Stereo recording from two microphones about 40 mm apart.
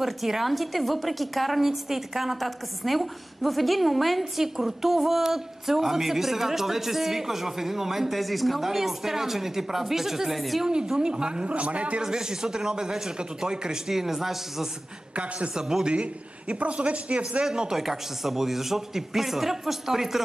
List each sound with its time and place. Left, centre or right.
0.0 s a woman's voice: centre
10.6 s a woman's voice: centre
11.5 s a man's voice: right
12.0 s a woman's voice: centre
15.1 s a man's voice: right
17.4 s a woman's voice: centre